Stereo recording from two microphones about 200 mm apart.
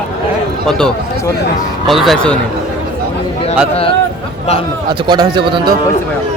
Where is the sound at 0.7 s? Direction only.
5° left (ahead or behind).